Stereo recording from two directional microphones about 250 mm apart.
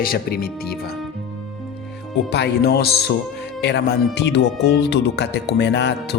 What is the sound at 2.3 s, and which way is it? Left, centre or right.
Speech, left.